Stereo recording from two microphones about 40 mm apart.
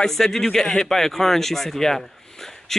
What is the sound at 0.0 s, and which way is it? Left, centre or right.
Speech, centre.